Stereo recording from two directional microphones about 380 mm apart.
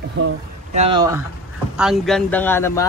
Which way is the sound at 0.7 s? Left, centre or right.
Centre.